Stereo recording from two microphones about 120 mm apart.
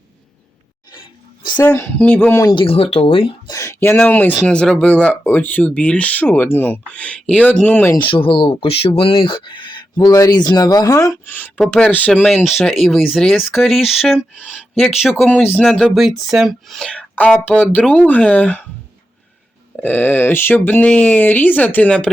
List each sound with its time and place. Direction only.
0.9 s a sound: 40° left (ahead or behind)
1.9 s speech: 10° left (ahead or behind)
2.3 s speech: 30° left (ahead or behind)
2.6 s speech: 50° left (ahead or behind)
3.5 s speech: 25° left (ahead or behind)
7.9 s speech: 45° left (ahead or behind); by 11.2 s 25° left (ahead or behind)
11.3 s speech: 15° left (ahead or behind)
11.6 s speech: centre (ahead or behind)
12.3 s speech: centre (ahead or behind)
19.8 s speech: 15° left (ahead or behind)